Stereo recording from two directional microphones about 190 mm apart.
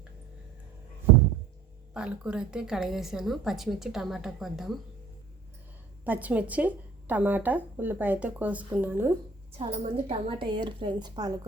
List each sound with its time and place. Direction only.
1.9 s a woman's voice: 5° right (ahead or behind)
6.1 s a woman's voice: 10° right (ahead or behind)
9.5 s a woman's voice: 35° right (ahead or behind)